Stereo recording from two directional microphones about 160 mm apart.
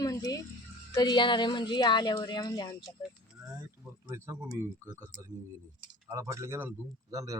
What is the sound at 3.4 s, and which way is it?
Speech, 15° right (ahead or behind).